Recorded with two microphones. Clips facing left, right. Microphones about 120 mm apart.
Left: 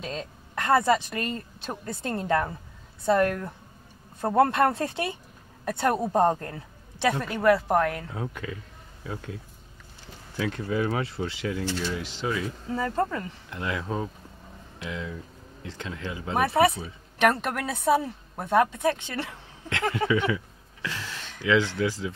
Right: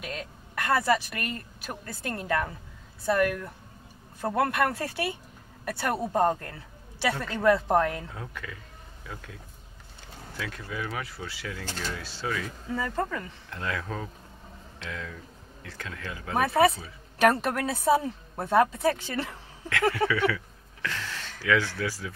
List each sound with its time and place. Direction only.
0.0 s a woman's voice: 25° left (ahead or behind)
7.4 s a woman's voice: 5° left (ahead or behind)
8.1 s a woman's voice: 25° left (ahead or behind)
17.2 s a woman's voice: 5° right (ahead or behind)
19.7 s speech: 20° left (ahead or behind)